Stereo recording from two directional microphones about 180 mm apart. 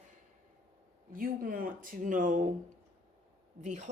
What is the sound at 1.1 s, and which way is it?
Speech, 50° right (ahead or behind).